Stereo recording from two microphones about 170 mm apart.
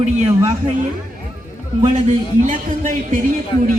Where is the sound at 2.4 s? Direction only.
50° right (ahead or behind).